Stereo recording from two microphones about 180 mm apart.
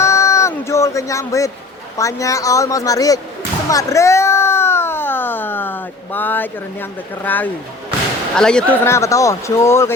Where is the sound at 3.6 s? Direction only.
20° left (ahead or behind).